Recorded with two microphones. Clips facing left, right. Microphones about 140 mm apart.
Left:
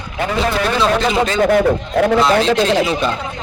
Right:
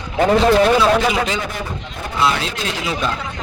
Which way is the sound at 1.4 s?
60° left (ahead or behind).